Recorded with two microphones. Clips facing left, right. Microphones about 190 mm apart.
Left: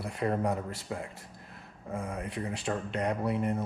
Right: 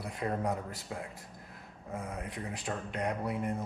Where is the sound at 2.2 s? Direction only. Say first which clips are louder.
Left 4 dB; 75° left (ahead or behind).